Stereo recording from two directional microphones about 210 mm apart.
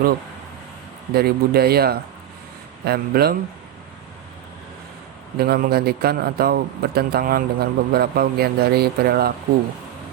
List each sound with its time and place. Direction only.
1.1 s a man's voice: 50° right (ahead or behind)
5.4 s a man's voice: 45° right (ahead or behind)